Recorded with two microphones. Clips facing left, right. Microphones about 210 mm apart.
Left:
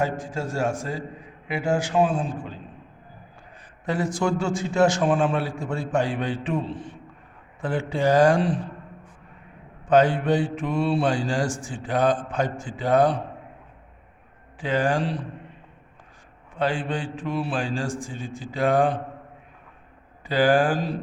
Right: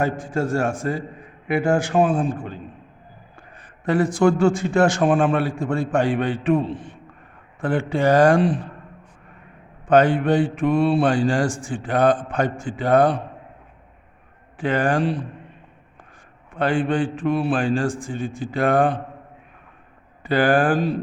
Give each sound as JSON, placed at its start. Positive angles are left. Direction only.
{"t": 0.0, "sound": "a man's voice", "side_deg": -55}
{"t": 3.8, "sound": "mantra", "side_deg": -55}
{"t": 7.6, "sound": "mantra", "side_deg": -60}
{"t": 9.9, "sound": "mantra", "side_deg": -60}
{"t": 14.6, "sound": "mantra", "side_deg": -55}
{"t": 16.6, "sound": "mantra", "side_deg": -55}
{"t": 20.2, "sound": "mantra", "side_deg": -55}